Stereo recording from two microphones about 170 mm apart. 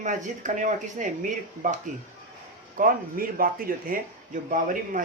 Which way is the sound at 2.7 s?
55° right (ahead or behind).